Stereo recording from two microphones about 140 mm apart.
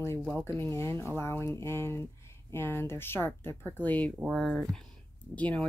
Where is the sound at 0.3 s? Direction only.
15° left (ahead or behind).